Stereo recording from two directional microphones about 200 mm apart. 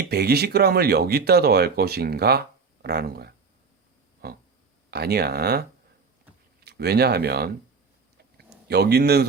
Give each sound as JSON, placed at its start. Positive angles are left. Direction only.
{"t": 0.0, "sound": "speech", "side_deg": -55}
{"t": 4.9, "sound": "speech", "side_deg": -55}
{"t": 6.7, "sound": "speech", "side_deg": -50}